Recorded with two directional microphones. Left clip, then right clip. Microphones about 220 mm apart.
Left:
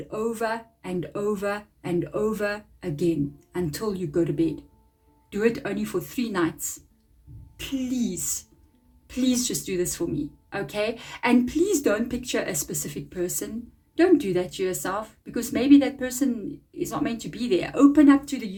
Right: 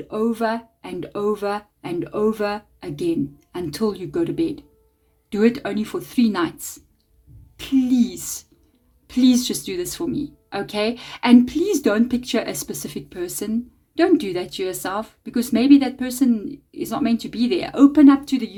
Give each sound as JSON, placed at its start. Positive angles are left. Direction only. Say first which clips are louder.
{"t": 0.1, "sound": "speech", "louder": "right 5 dB", "side_deg": -40}